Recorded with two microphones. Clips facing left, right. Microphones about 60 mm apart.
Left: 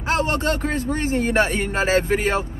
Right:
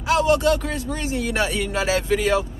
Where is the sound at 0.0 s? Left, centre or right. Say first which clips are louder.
Right 3 dB; left.